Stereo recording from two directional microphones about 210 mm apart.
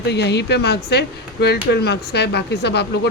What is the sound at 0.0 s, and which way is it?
Speech, 55° left (ahead or behind).